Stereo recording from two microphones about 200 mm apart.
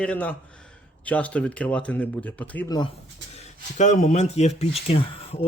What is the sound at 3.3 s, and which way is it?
Speech, 35° left (ahead or behind).